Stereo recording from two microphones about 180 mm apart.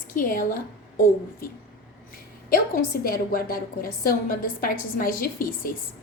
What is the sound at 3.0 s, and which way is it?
A woman's voice, 55° left (ahead or behind).